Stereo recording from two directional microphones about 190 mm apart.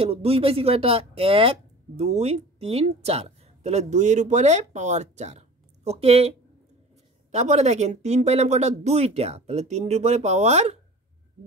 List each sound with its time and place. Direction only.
0.0 s speech: 30° right (ahead or behind)